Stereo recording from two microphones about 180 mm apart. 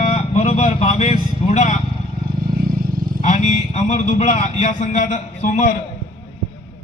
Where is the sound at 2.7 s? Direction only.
55° right (ahead or behind).